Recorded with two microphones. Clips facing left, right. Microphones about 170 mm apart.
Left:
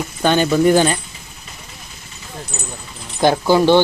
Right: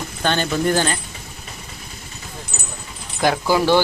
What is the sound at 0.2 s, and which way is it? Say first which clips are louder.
Speech: left 6 dB; 10° left (ahead or behind).